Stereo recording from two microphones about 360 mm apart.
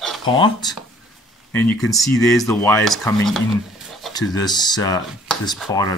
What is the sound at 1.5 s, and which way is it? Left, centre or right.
Speech, centre.